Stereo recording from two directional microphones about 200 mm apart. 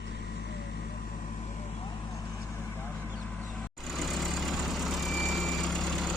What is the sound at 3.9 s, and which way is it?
Vehicle, centre (ahead or behind).